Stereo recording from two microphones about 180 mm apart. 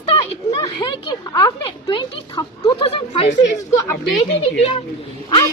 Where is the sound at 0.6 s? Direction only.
20° left (ahead or behind).